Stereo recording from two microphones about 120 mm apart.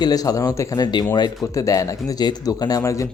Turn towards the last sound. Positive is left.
turn(degrees=25)  # may be behind; listen again after turning